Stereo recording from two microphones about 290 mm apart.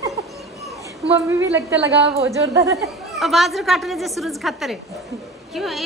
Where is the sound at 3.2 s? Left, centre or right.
Centre.